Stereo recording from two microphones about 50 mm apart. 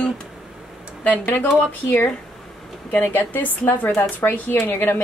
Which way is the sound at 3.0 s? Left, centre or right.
Left.